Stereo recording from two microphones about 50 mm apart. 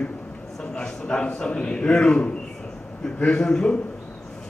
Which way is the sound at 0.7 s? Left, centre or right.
Centre.